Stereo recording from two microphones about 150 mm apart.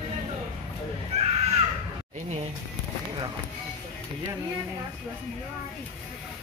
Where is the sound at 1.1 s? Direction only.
45° right (ahead or behind).